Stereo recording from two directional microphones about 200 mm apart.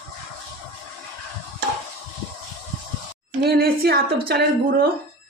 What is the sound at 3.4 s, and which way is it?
A man's voice, 55° right (ahead or behind).